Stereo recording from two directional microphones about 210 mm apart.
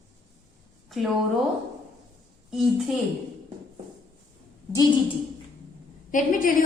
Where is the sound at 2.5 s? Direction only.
Centre (ahead or behind).